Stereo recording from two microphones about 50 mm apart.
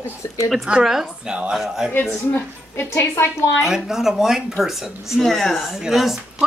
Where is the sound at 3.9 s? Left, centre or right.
Centre.